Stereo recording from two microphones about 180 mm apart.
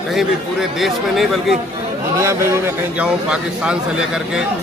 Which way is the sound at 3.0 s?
5° right (ahead or behind).